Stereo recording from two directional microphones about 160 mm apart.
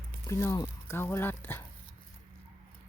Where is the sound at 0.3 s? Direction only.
20° left (ahead or behind).